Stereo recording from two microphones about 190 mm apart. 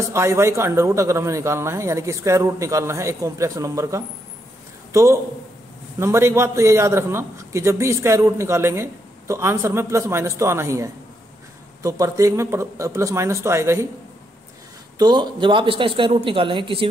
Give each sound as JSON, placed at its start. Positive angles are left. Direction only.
{"t": 0.1, "sound": "a man's voice", "side_deg": -15}
{"t": 15.0, "sound": "speech", "side_deg": -25}